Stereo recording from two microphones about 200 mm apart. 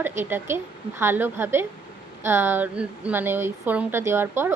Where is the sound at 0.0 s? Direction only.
10° right (ahead or behind).